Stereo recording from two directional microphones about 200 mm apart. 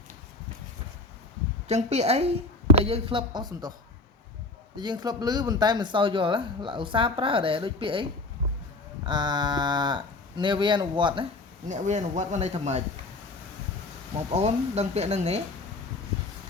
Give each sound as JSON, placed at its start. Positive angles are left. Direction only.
{"t": 1.6, "sound": "speech", "side_deg": -35}
{"t": 4.8, "sound": "speech", "side_deg": -20}
{"t": 9.0, "sound": "speech", "side_deg": -20}
{"t": 11.7, "sound": "speech", "side_deg": -35}
{"t": 14.2, "sound": "speech", "side_deg": -30}